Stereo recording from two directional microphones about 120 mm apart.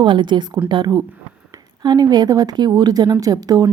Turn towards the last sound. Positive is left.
turn(degrees=-35)  # may be behind; listen again after turning